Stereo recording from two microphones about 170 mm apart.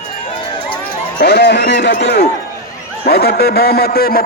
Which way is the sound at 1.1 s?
75° left (ahead or behind).